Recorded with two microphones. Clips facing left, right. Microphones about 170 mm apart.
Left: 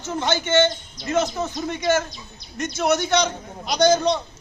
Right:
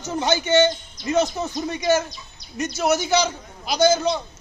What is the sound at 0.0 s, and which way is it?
Speech, 10° right (ahead or behind).